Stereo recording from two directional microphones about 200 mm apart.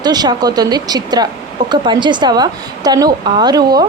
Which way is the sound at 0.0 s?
20° right (ahead or behind).